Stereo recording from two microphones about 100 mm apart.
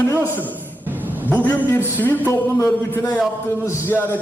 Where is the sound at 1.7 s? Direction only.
20° left (ahead or behind).